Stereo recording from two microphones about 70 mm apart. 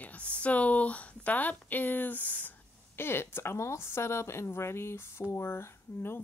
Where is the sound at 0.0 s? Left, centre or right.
Centre.